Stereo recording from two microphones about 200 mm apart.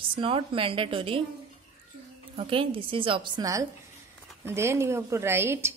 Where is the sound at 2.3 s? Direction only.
25° right (ahead or behind).